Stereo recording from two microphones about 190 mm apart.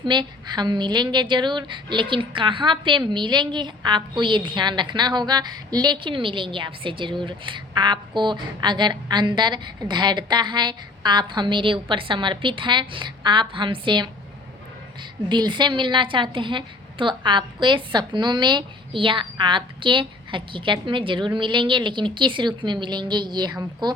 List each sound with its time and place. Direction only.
0.0 s a woman's voice: 25° right (ahead or behind)
15.3 s a woman's voice: 25° right (ahead or behind)